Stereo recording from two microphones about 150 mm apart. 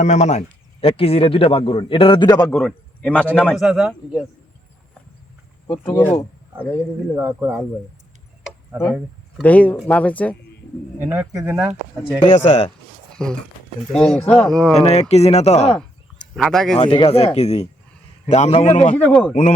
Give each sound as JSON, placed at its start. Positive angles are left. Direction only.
{"t": 0.0, "sound": "speech", "side_deg": 50}
{"t": 2.5, "sound": "a man's voice", "side_deg": 5}
{"t": 3.5, "sound": "speech", "side_deg": -5}
{"t": 5.9, "sound": "a man's voice", "side_deg": 10}
{"t": 7.2, "sound": "speech", "side_deg": -15}
{"t": 8.7, "sound": "speech", "side_deg": -10}
{"t": 9.4, "sound": "a man's voice", "side_deg": 10}
{"t": 11.0, "sound": "speech", "side_deg": -15}
{"t": 11.6, "sound": "speech", "side_deg": -5}
{"t": 15.1, "sound": "speech", "side_deg": 45}
{"t": 16.3, "sound": "speech", "side_deg": 0}
{"t": 16.8, "sound": "speech", "side_deg": 35}
{"t": 18.9, "sound": "a man's voice", "side_deg": 10}
{"t": 19.3, "sound": "speech", "side_deg": 50}